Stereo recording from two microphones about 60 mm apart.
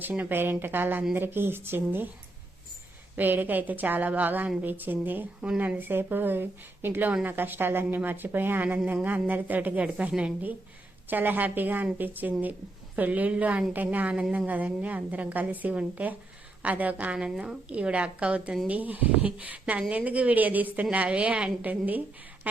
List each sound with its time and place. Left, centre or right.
0.1 s a woman's voice: right
3.2 s a woman's voice: right
11.1 s a woman's voice: right
17.2 s a woman's voice: centre